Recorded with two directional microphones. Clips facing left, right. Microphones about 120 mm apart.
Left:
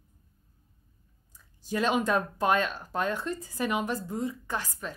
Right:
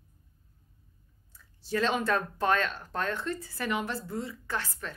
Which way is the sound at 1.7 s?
15° left (ahead or behind).